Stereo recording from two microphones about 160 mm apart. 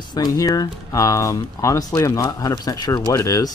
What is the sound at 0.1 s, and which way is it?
Speech, 25° left (ahead or behind).